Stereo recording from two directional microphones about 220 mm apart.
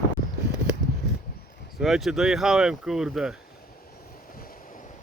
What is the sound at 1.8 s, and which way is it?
Speech, centre (ahead or behind).